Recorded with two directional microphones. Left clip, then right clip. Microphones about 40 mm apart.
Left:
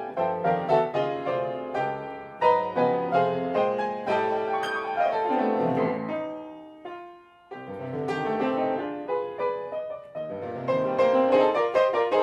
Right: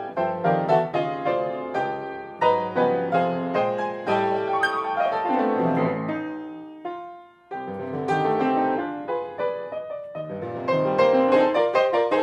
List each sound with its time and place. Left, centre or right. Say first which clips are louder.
0.4 s music: right 3 dB; right
7.9 s music: right 5 dB; right
8.2 s music: right 4 dB; right
10.6 s music: right 3 dB; right